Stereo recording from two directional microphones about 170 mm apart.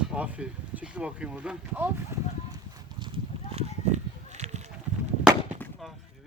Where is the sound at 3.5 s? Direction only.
40° right (ahead or behind).